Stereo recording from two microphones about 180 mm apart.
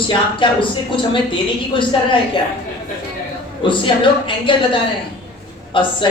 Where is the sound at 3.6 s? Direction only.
30° left (ahead or behind).